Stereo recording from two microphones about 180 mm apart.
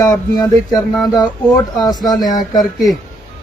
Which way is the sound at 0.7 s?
Centre (ahead or behind).